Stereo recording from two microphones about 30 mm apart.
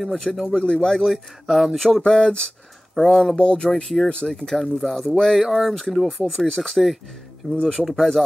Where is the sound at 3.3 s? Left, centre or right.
Left.